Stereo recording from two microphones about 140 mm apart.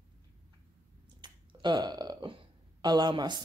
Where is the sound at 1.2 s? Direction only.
35° right (ahead or behind).